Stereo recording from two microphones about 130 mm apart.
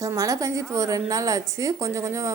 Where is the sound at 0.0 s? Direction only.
25° right (ahead or behind).